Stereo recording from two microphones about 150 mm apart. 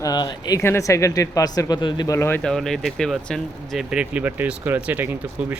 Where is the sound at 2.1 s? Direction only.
15° left (ahead or behind).